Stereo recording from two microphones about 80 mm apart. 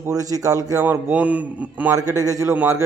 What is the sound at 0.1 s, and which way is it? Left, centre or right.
Speech, right.